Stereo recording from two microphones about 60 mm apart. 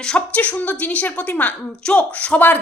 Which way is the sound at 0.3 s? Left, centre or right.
Left.